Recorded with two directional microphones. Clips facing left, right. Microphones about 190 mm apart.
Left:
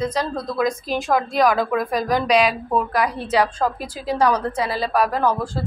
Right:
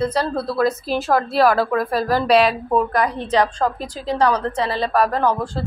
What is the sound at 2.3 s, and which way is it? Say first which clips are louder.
A woman's voice: right 3 dB; centre (ahead or behind).